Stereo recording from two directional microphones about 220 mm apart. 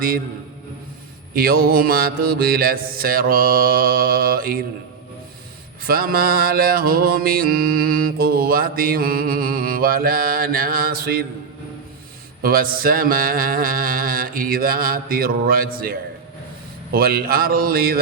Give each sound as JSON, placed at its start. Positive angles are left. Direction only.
{"t": 1.3, "sound": "mantra", "side_deg": -45}
{"t": 5.8, "sound": "music", "side_deg": -40}
{"t": 12.4, "sound": "music", "side_deg": -40}
{"t": 16.9, "sound": "mantra", "side_deg": -45}